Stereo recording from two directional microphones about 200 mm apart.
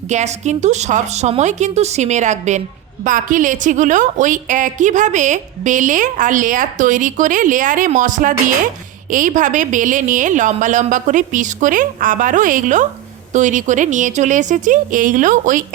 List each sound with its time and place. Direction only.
0.1 s a woman's voice: 35° right (ahead or behind)